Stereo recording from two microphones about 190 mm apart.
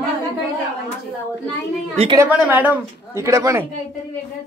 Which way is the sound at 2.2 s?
10° right (ahead or behind).